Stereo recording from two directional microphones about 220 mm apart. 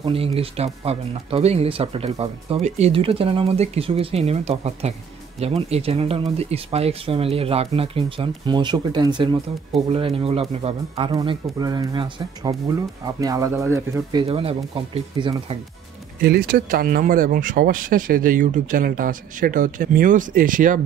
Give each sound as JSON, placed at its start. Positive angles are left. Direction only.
{"t": 0.0, "sound": "speech", "side_deg": -25}
{"t": 14.2, "sound": "speech", "side_deg": -25}
{"t": 16.2, "sound": "speech", "side_deg": -45}